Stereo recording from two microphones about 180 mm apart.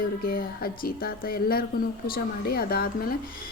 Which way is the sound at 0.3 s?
55° left (ahead or behind).